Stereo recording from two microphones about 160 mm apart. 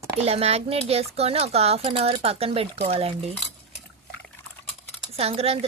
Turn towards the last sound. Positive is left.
turn(degrees=-40)  # may be behind; listen again after turning